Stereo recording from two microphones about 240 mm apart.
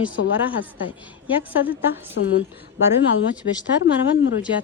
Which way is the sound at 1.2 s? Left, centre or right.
Centre.